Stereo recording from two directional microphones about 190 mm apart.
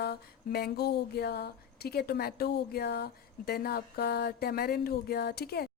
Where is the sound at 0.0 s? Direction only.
55° left (ahead or behind).